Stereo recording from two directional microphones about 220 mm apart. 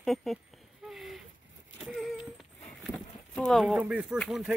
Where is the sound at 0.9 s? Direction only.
Centre (ahead or behind).